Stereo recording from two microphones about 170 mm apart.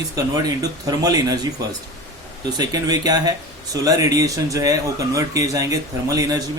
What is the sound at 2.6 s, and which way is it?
Speech, 20° right (ahead or behind).